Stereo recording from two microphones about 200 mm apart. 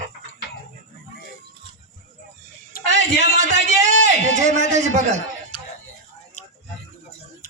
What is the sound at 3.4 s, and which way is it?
A man's voice, 35° right (ahead or behind).